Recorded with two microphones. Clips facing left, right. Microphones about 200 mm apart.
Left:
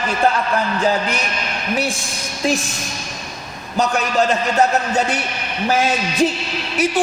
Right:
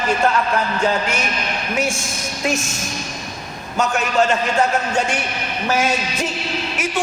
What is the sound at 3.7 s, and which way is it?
Speech, 35° left (ahead or behind).